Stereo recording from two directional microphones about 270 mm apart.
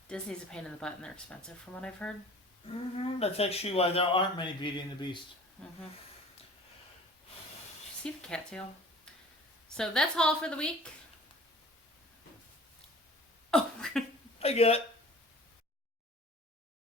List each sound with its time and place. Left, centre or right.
0.1 s a woman's voice: centre
3.0 s speech: left
8.0 s a woman's voice: centre
9.6 s a woman's voice: centre
13.5 s a sound: centre
14.3 s speech: left